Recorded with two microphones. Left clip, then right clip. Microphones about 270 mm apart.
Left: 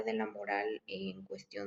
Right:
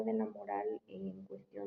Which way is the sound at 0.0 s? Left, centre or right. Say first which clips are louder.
Left 1 dB; left.